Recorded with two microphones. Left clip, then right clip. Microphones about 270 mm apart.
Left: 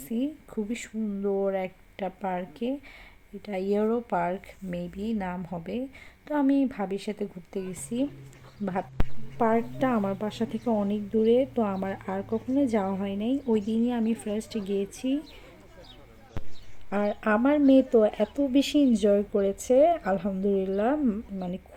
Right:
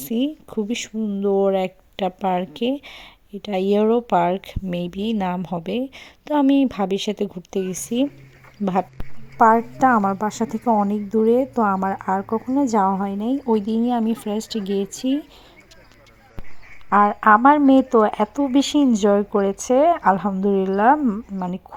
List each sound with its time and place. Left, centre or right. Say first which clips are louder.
0.0 s speech: right 8 dB; right
9.4 s a woman's voice: right 10 dB; centre
16.9 s speech: right 12 dB; centre